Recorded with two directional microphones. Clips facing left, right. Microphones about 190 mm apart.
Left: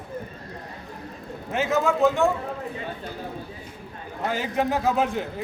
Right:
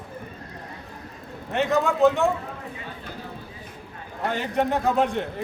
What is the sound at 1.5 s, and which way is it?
Speech, centre (ahead or behind).